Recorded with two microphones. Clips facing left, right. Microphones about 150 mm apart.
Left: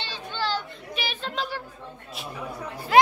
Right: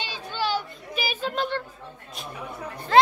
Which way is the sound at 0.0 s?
10° right (ahead or behind).